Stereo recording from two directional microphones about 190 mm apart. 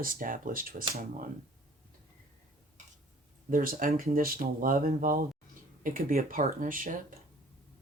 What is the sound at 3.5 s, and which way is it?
Speech, 45° right (ahead or behind).